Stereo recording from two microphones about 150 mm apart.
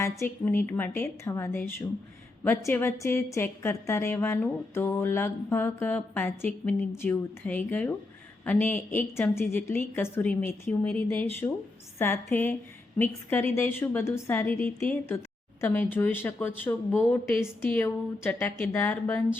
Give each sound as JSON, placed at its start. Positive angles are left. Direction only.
{"t": 0.0, "sound": "a woman's voice", "side_deg": 15}